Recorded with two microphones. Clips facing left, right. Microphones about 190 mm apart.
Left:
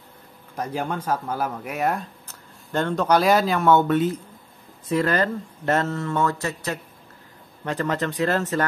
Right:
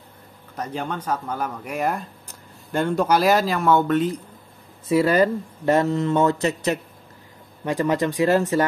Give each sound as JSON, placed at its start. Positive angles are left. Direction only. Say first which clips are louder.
{"t": 0.6, "sound": "speech", "louder": "left 1 dB", "side_deg": 10}
{"t": 4.8, "sound": "speech", "louder": "right 4 dB", "side_deg": -10}